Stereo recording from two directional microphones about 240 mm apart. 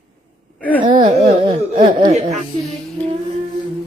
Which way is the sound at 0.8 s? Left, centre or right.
Centre.